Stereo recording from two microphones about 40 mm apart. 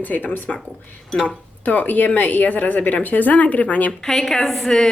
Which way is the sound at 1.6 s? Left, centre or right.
Left.